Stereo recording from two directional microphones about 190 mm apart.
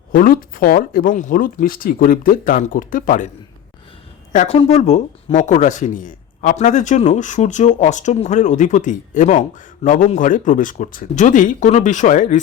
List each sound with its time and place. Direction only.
0.1 s speech: 50° left (ahead or behind)
4.3 s speech: 35° left (ahead or behind)